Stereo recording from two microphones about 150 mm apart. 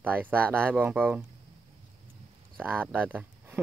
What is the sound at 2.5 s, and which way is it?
Speech, 10° right (ahead or behind).